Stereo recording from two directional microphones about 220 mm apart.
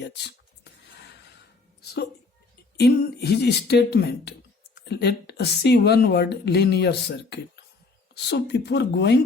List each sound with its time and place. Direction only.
0.0 s writing: 50° left (ahead or behind)
1.8 s a sound: 45° left (ahead or behind)
2.7 s speech: 45° left (ahead or behind)